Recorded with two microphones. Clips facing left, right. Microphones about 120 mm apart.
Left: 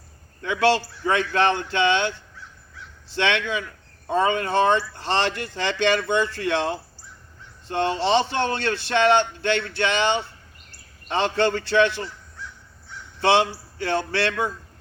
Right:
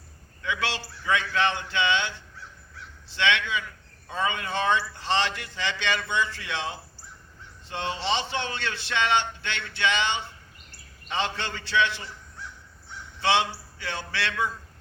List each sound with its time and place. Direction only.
0.7 s speech: 50° left (ahead or behind)
3.2 s speech: 45° left (ahead or behind)
13.2 s speech: 45° left (ahead or behind)